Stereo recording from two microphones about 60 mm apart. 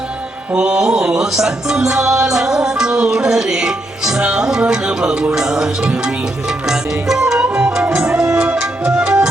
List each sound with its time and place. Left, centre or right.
0.5 s music: centre